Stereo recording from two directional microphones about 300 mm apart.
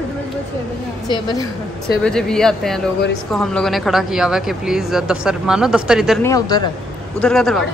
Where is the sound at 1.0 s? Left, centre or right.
Centre.